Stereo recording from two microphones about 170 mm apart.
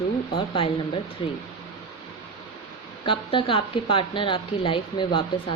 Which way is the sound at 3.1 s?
30° left (ahead or behind).